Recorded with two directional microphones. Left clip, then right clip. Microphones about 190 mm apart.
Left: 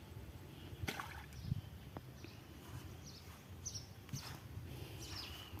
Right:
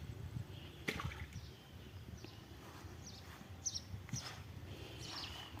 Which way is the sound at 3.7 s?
30° left (ahead or behind).